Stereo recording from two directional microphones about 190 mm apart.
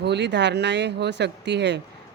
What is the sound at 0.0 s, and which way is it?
Speech, 65° right (ahead or behind).